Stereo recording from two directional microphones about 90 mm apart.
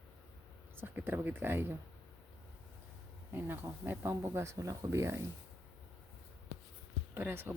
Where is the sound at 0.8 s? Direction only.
25° right (ahead or behind).